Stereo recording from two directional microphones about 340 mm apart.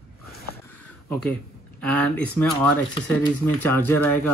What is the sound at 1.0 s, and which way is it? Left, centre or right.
Speech, centre.